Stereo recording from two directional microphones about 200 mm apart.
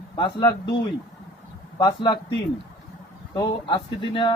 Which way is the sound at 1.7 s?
25° left (ahead or behind).